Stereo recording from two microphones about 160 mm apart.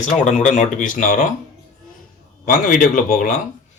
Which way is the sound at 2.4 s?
60° left (ahead or behind).